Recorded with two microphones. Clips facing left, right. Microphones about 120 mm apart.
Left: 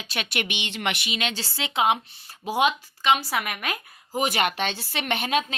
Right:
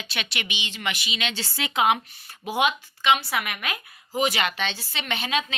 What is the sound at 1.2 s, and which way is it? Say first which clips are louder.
Speech: left 1 dB; 40° left (ahead or behind).